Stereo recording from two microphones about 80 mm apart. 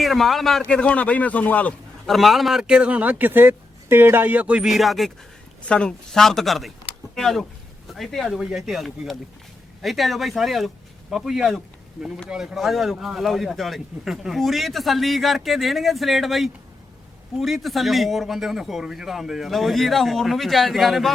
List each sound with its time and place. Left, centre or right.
0.0 s a man's voice: centre
0.6 s speech: centre
2.0 s a man's voice: centre
4.7 s a man's voice: centre
5.6 s a man's voice: centre
8.4 s a man's voice: centre